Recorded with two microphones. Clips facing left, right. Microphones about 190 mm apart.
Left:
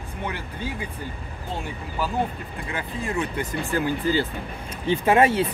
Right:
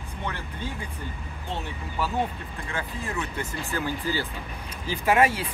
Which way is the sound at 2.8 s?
15° left (ahead or behind).